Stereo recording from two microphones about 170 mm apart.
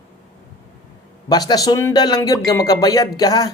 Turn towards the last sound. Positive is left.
turn(degrees=20)  # may be behind; listen again after turning